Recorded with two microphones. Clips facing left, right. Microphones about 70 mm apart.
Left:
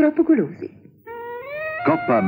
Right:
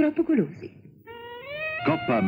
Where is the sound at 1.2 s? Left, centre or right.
Left.